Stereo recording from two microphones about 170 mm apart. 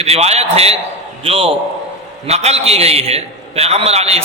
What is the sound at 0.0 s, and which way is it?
A man's voice, 40° right (ahead or behind).